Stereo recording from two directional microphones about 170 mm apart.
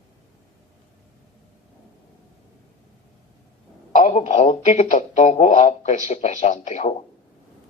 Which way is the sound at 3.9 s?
45° left (ahead or behind).